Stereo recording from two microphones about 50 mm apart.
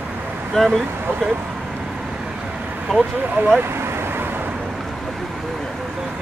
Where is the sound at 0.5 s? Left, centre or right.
Centre.